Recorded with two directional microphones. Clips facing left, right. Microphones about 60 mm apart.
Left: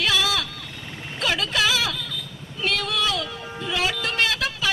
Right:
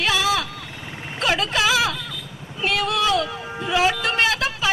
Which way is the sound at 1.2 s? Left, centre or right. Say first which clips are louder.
Right 2 dB; right.